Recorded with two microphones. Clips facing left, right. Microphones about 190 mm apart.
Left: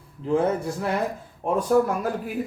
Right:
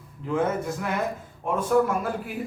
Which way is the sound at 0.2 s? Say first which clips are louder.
Left 3 dB; 35° left (ahead or behind).